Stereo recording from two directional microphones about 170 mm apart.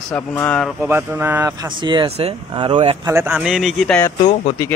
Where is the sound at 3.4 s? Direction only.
Centre (ahead or behind).